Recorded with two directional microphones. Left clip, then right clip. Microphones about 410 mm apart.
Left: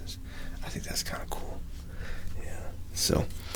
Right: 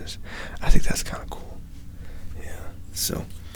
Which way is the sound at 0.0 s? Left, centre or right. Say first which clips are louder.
Right 9 dB; right.